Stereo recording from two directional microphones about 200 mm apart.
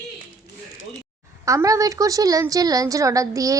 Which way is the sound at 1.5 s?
15° right (ahead or behind).